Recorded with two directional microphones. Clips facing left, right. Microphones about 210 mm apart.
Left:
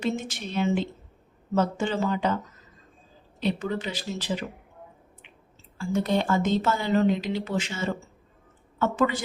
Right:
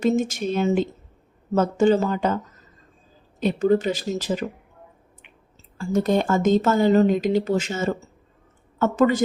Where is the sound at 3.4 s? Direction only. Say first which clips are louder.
Right 9 dB; 45° right (ahead or behind).